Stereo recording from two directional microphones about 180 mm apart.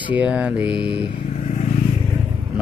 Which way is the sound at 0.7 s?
30° left (ahead or behind).